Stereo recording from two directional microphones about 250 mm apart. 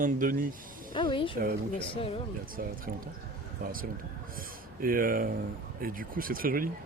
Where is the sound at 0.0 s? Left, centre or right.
Right.